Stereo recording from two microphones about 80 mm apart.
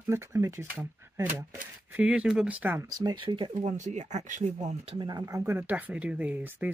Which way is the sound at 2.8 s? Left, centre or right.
Right.